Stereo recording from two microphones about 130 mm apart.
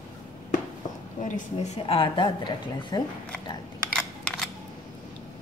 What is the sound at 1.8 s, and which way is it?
A woman's voice, 40° left (ahead or behind).